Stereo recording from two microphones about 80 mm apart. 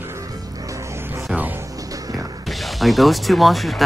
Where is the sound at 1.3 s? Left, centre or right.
Right.